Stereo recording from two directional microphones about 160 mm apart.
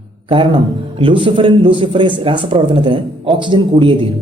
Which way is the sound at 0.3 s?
35° right (ahead or behind).